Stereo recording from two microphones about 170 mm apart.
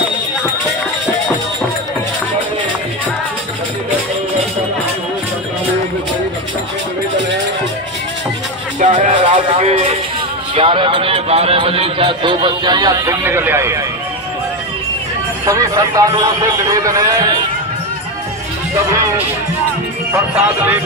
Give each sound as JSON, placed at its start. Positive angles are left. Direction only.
{"t": 8.7, "sound": "music", "side_deg": -50}
{"t": 9.6, "sound": "a sound", "side_deg": -35}
{"t": 10.5, "sound": "a man's voice", "side_deg": -30}
{"t": 15.4, "sound": "a man's voice", "side_deg": -20}